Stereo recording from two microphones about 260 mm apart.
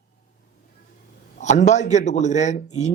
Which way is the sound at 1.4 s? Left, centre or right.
Left.